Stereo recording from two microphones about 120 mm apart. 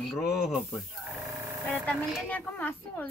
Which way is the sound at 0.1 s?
5° right (ahead or behind).